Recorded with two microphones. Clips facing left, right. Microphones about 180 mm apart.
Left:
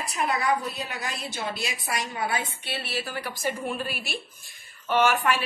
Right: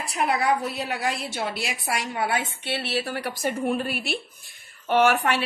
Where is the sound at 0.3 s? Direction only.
75° right (ahead or behind).